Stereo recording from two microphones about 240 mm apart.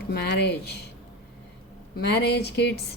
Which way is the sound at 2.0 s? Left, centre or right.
Left.